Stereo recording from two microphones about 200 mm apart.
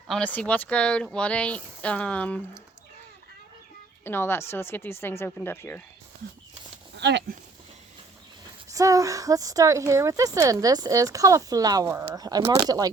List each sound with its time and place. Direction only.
0.1 s speech: 5° left (ahead or behind)
4.0 s speech: 10° left (ahead or behind)
6.9 s speech: 60° right (ahead or behind)
8.7 s speech: 15° right (ahead or behind)